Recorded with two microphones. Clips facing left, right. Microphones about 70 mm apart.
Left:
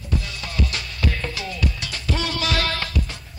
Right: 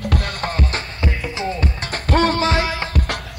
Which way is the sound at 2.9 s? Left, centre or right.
Right.